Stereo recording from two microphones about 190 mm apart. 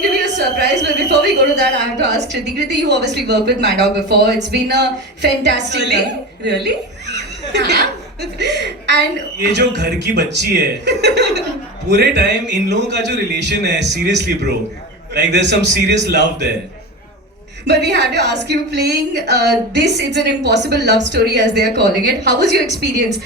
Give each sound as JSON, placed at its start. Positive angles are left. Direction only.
{"t": 0.6, "sound": "a woman's voice", "side_deg": -60}
{"t": 7.1, "sound": "a sound", "side_deg": -65}
{"t": 8.2, "sound": "a woman's voice", "side_deg": -65}
{"t": 17.7, "sound": "a woman's voice", "side_deg": -60}